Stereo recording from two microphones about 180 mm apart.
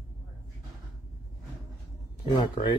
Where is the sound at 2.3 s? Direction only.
25° left (ahead or behind).